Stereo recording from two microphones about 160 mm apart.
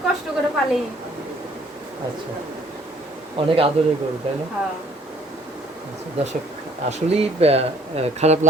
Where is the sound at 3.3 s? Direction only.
35° right (ahead or behind).